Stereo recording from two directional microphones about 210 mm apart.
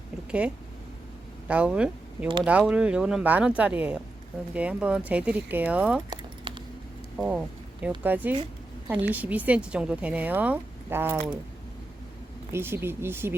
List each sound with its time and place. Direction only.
0.3 s a woman's voice: 5° right (ahead or behind)
6.1 s keys jangling: 25° right (ahead or behind)
7.2 s a woman's voice: 5° right (ahead or behind)
12.5 s a woman's voice: 10° right (ahead or behind)